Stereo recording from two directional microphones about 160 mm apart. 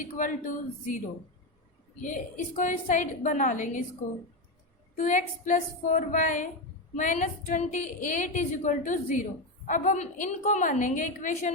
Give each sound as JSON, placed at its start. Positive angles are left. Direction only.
{"t": 0.2, "sound": "speech", "side_deg": 55}
{"t": 2.0, "sound": "a woman's voice", "side_deg": 50}
{"t": 4.9, "sound": "a woman's voice", "side_deg": 55}